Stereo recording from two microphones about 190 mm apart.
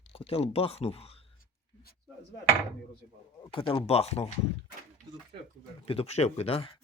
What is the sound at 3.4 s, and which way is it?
Speech, 25° left (ahead or behind).